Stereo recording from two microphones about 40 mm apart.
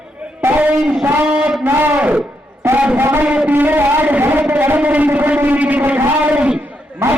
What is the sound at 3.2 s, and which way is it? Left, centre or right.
Speech, right.